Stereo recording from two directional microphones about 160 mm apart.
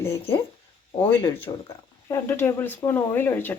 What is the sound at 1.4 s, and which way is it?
Speech, 15° left (ahead or behind).